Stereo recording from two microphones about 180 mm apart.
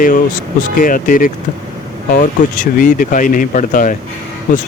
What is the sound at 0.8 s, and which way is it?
Speech, 50° left (ahead or behind).